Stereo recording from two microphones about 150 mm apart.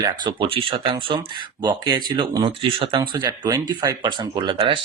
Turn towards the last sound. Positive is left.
turn(degrees=-35)  # may be behind; listen again after turning